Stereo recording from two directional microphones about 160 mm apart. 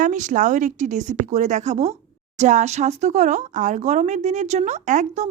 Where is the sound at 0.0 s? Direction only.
50° right (ahead or behind).